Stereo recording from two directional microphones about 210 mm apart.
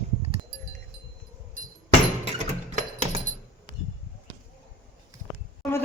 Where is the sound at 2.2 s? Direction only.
30° right (ahead or behind).